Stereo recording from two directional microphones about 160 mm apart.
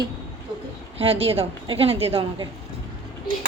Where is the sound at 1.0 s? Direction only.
35° right (ahead or behind).